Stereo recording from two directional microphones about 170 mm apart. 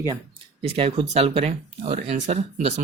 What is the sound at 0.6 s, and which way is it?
Speech, 35° right (ahead or behind).